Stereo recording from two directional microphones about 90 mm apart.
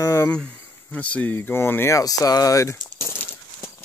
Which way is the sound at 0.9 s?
15° left (ahead or behind).